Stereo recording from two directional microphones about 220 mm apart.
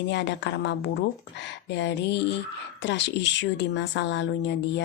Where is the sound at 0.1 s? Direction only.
55° left (ahead or behind).